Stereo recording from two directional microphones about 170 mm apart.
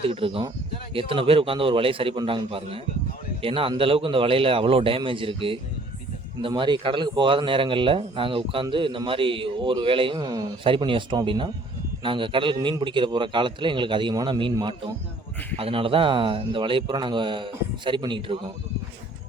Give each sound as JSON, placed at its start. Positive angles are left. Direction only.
{"t": 0.0, "sound": "a man's voice", "side_deg": -30}